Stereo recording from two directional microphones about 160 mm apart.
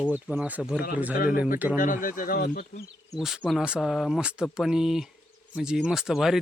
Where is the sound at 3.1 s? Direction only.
Centre (ahead or behind).